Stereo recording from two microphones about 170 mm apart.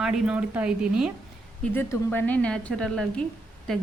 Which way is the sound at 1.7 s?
10° left (ahead or behind).